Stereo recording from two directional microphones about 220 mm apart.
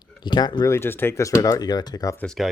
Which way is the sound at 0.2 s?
20° left (ahead or behind).